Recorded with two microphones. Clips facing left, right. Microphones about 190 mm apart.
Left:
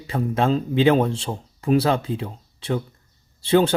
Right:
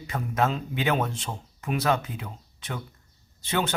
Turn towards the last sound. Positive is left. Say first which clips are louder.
# left 10 dB
turn(degrees=30)  # may be behind; listen again after turning